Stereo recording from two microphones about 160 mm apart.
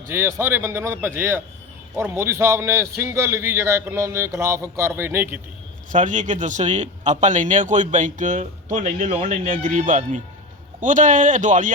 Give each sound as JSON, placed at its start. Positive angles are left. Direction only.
{"t": 0.1, "sound": "a man's voice", "side_deg": -15}
{"t": 5.9, "sound": "a man's voice", "side_deg": -50}